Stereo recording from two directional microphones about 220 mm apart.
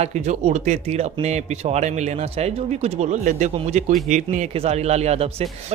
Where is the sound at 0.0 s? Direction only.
30° right (ahead or behind).